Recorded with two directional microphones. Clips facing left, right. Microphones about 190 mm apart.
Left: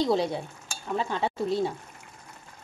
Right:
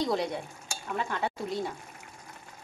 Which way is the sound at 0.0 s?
30° left (ahead or behind).